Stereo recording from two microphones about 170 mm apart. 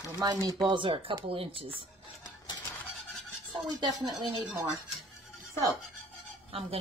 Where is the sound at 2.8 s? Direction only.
Centre (ahead or behind).